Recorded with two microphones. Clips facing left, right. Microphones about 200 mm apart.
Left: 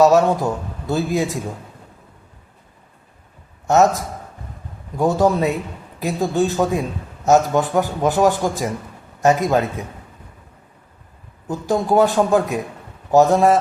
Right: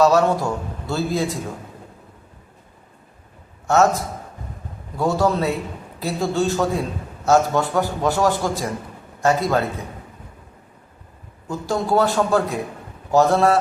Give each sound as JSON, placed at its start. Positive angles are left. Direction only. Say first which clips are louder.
{"t": 0.0, "sound": "a man's voice", "louder": "left 2 dB", "side_deg": 15}
{"t": 3.7, "sound": "a man's voice", "louder": "left 2 dB", "side_deg": 15}
{"t": 4.9, "sound": "a man's voice", "louder": "left 3 dB", "side_deg": 15}
{"t": 11.4, "sound": "a man's voice", "louder": "left 3 dB", "side_deg": 15}